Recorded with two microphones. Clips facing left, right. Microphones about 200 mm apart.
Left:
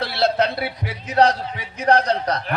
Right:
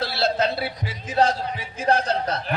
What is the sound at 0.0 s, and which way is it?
A man's voice, 60° left (ahead or behind).